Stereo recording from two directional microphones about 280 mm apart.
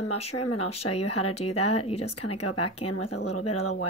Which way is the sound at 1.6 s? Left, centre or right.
Left.